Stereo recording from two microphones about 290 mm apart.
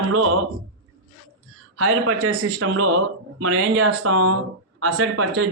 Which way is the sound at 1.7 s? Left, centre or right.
Right.